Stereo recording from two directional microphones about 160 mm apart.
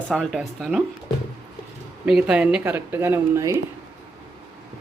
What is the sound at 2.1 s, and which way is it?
Speech, 5° right (ahead or behind).